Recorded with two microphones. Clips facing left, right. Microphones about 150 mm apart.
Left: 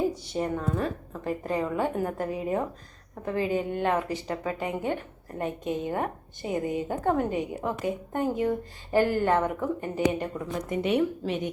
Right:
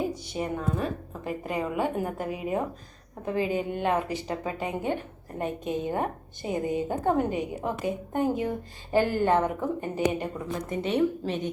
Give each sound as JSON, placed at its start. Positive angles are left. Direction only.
{"t": 0.1, "sound": "a woman's voice", "side_deg": -5}
{"t": 10.7, "sound": "a woman's voice", "side_deg": 10}